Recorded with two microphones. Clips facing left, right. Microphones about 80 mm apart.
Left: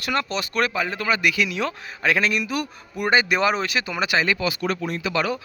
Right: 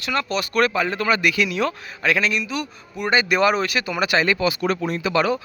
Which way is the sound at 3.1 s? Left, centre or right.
Left.